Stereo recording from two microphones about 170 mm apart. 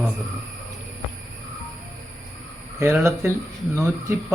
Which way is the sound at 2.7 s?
15° right (ahead or behind).